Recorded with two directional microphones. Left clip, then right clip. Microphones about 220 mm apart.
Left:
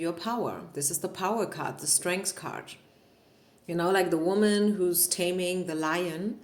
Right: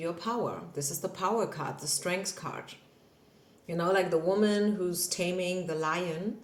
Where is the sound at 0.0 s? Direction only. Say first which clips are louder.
Left 2 dB; 45° left (ahead or behind).